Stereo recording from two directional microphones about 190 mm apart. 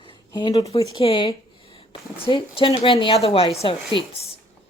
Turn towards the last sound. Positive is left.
turn(degrees=30)  # may be behind; listen again after turning